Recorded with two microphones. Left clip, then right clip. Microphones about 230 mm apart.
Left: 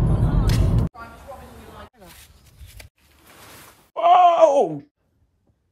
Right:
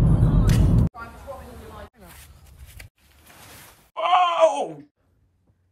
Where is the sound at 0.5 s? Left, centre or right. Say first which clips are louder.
Right 1 dB; centre.